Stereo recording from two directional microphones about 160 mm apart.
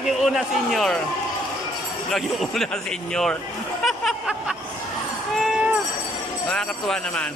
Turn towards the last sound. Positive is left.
turn(degrees=5)  # may be behind; listen again after turning